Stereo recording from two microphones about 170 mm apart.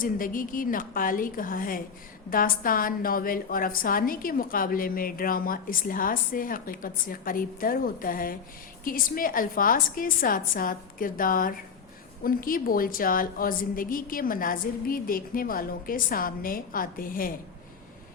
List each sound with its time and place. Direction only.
0.0 s a woman's voice: 55° left (ahead or behind)